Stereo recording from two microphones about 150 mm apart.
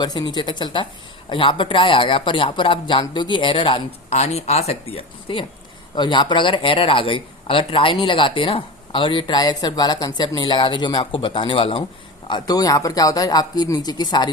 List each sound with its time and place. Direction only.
0.0 s speech: 30° left (ahead or behind)
12.3 s speech: 25° left (ahead or behind)